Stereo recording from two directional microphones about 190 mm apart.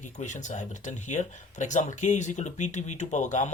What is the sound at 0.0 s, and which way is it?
Speech, 40° left (ahead or behind).